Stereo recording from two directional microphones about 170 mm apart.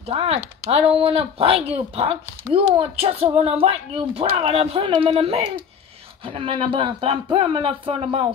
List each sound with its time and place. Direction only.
0.0 s speech: 35° right (ahead or behind)